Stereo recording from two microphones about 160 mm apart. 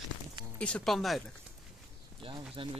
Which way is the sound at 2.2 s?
30° right (ahead or behind).